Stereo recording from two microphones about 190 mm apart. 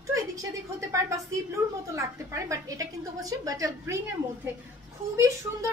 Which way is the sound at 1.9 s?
15° right (ahead or behind).